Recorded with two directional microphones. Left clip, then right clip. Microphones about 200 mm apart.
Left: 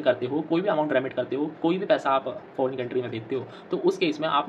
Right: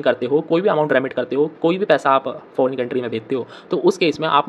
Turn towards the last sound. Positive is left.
turn(degrees=-50)  # may be behind; listen again after turning